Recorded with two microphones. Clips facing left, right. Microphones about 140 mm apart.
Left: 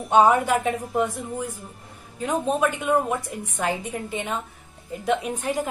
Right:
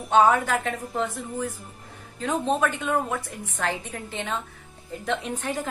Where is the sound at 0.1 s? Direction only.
25° left (ahead or behind).